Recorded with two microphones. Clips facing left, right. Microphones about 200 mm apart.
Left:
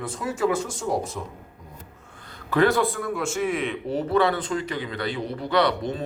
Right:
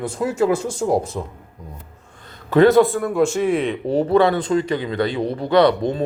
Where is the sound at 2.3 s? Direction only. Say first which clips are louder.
Right 7 dB; 20° right (ahead or behind).